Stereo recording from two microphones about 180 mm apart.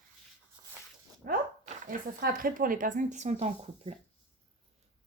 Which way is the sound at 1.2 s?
45° right (ahead or behind).